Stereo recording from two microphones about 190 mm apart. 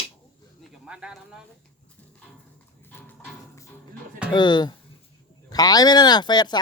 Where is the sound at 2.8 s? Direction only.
10° left (ahead or behind).